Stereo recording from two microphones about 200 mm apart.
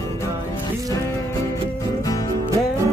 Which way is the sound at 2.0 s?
15° left (ahead or behind).